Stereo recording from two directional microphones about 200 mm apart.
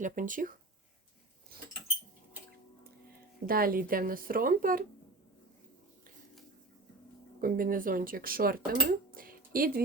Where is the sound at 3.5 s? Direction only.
45° right (ahead or behind).